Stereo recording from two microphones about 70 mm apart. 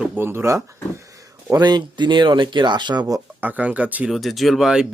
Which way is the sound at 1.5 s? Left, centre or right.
Right.